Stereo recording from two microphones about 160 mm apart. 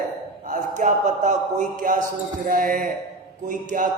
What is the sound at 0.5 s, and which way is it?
A man's voice, 50° right (ahead or behind).